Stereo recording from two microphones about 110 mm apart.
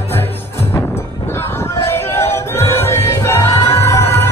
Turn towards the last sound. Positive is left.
turn(degrees=25)  # may be behind; listen again after turning